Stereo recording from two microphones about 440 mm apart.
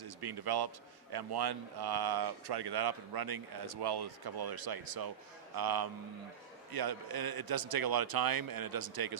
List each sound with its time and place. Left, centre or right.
0.0 s a man's voice: right